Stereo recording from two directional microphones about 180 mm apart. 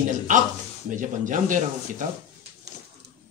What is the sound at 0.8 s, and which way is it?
Speech, 45° right (ahead or behind).